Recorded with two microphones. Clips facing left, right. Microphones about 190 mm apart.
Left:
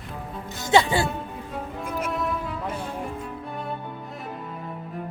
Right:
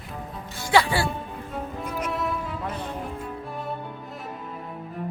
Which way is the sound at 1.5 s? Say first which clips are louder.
Even; 5° left (ahead or behind).